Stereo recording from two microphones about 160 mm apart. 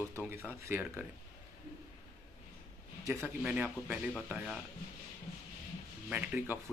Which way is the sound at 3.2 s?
5° right (ahead or behind).